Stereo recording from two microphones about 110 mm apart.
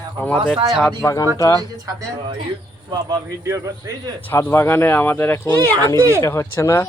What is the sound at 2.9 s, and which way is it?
A man's voice, 35° right (ahead or behind).